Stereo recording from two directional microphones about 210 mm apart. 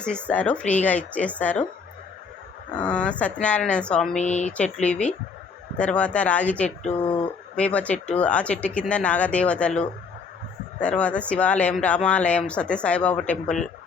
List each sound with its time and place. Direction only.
0.0 s a woman's voice: 5° left (ahead or behind)
2.7 s speech: 5° left (ahead or behind)
4.2 s speech: 35° left (ahead or behind)
4.5 s speech: 5° left (ahead or behind)